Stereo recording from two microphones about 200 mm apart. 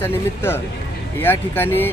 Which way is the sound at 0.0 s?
10° left (ahead or behind).